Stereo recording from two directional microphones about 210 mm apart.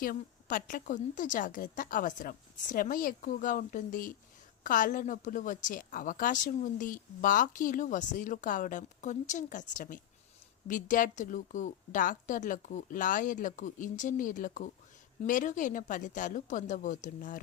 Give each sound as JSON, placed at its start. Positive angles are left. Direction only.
{"t": 0.0, "sound": "a woman's voice", "side_deg": 40}